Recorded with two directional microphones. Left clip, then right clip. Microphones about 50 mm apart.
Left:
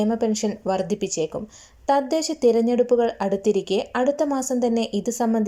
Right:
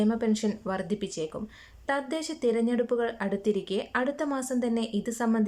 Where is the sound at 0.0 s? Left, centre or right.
Centre.